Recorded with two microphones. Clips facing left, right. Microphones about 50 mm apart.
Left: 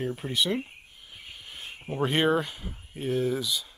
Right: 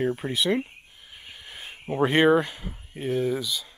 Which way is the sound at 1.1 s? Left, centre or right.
Centre.